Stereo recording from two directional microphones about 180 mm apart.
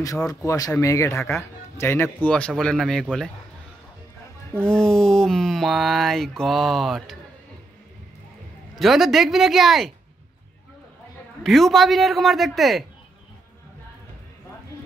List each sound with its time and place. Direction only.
0.5 s speech: 20° left (ahead or behind)
4.6 s speech: 5° left (ahead or behind)
8.7 s speech: centre (ahead or behind)
11.4 s speech: centre (ahead or behind)